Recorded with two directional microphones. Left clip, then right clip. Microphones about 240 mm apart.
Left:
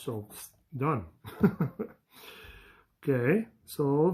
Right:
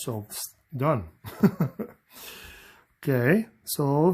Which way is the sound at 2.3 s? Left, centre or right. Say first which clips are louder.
Right 5 dB; right.